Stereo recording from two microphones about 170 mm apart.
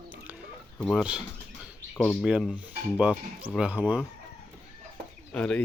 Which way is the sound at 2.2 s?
5° right (ahead or behind).